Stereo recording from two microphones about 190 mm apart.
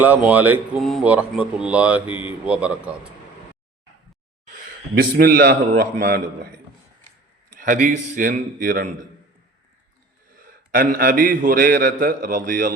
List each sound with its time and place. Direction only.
0.3 s speech: 10° right (ahead or behind)
4.9 s a man's voice: 50° right (ahead or behind)
7.5 s a man's voice: 45° right (ahead or behind)
10.3 s a man's voice: 45° right (ahead or behind)